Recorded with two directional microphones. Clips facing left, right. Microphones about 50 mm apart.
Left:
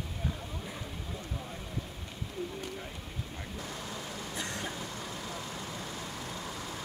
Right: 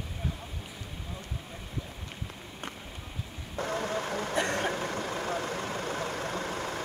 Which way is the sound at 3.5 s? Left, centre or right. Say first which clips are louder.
Right 12 dB; right.